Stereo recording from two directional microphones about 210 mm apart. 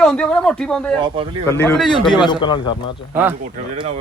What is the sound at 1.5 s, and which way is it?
Speech, 10° left (ahead or behind).